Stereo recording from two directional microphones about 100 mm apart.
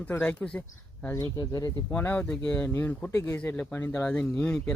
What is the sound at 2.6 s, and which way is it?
Speech, 20° left (ahead or behind).